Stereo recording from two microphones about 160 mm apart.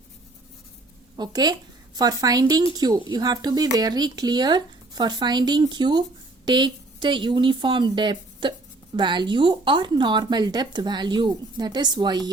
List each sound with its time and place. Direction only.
1.1 s speech: 25° right (ahead or behind)